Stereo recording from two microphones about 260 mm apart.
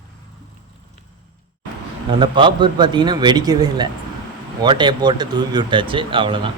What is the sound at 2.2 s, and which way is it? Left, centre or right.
A man's voice, centre.